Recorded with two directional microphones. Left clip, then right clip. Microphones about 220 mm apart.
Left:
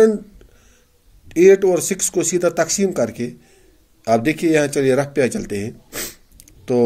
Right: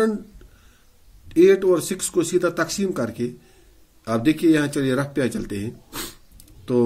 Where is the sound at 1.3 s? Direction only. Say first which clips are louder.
Left 3 dB; 15° left (ahead or behind).